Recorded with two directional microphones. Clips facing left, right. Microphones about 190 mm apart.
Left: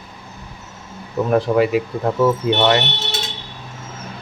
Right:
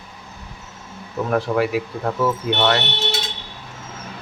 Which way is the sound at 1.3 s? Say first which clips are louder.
Left 4 dB; 20° left (ahead or behind).